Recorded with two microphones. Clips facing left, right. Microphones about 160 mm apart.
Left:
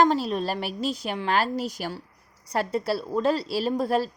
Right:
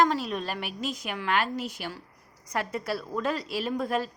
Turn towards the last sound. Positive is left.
turn(degrees=35)  # may be behind; listen again after turning